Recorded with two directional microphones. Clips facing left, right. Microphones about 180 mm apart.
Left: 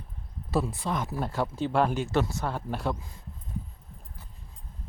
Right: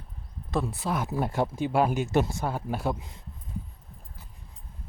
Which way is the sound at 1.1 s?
15° right (ahead or behind).